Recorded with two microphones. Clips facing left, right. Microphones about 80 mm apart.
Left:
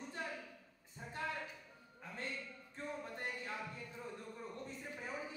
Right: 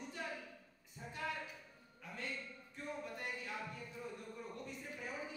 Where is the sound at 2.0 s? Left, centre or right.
Left.